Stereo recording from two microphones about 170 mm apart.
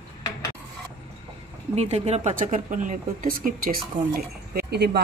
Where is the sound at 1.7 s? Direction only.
40° right (ahead or behind); by 3.8 s 55° right (ahead or behind).